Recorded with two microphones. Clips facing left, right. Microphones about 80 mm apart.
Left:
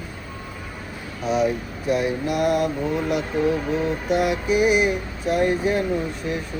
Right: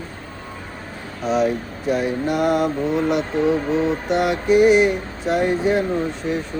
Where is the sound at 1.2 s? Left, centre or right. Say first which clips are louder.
Right 2 dB; centre.